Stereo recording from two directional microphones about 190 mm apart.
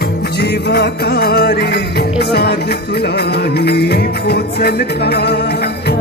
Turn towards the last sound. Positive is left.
turn(degrees=60)  # may be behind; listen again after turning